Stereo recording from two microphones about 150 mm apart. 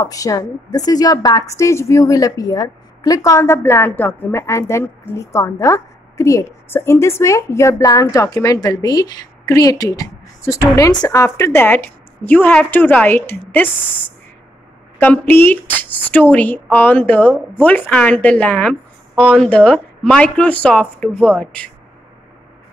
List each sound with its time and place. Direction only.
0.0 s a woman's voice: 25° left (ahead or behind)
15.0 s speech: 15° left (ahead or behind)